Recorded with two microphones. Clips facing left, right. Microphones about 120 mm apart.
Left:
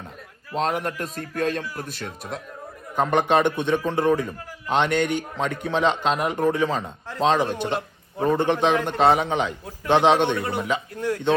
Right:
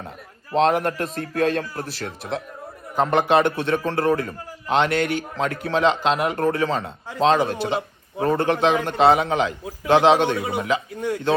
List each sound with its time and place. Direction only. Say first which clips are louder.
0.5 s a man's voice: right 6 dB; 45° right (ahead or behind)
2.9 s a man's voice: right 2 dB; 5° right (ahead or behind)